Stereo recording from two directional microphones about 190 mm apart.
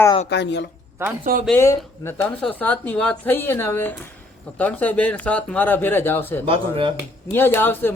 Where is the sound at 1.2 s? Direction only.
45° right (ahead or behind).